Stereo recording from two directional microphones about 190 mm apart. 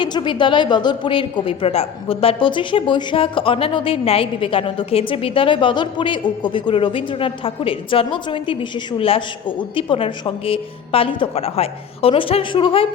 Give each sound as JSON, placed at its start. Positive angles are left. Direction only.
{"t": 0.0, "sound": "a woman's voice", "side_deg": 25}